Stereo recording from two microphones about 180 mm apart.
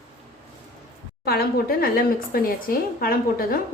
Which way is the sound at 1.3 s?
55° left (ahead or behind).